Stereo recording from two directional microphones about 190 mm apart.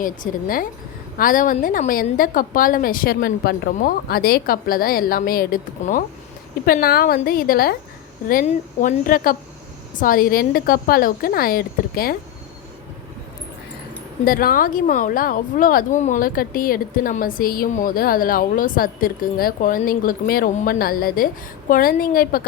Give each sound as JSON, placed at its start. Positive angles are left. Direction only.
{"t": 0.0, "sound": "speech", "side_deg": 45}
{"t": 14.3, "sound": "speech", "side_deg": 50}